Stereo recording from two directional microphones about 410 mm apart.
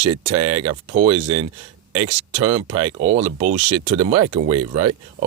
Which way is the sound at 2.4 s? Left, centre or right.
Centre.